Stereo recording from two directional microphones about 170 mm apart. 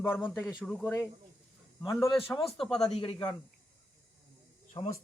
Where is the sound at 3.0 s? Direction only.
25° left (ahead or behind).